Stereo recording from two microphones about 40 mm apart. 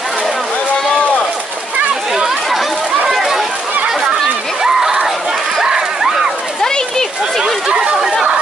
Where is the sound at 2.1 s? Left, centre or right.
Centre.